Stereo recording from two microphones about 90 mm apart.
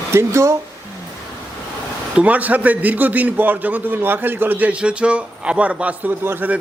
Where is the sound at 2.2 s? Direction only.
15° right (ahead or behind).